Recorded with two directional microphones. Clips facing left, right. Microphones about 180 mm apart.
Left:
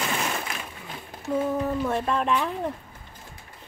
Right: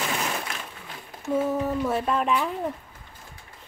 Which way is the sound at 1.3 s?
5° right (ahead or behind).